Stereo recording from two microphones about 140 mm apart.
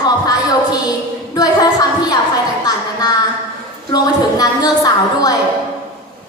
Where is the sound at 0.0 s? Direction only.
25° left (ahead or behind).